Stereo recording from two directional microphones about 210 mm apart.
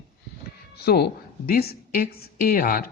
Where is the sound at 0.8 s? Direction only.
50° left (ahead or behind).